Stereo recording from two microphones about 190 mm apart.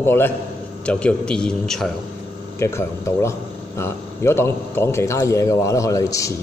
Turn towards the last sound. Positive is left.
turn(degrees=15)  # may be behind; listen again after turning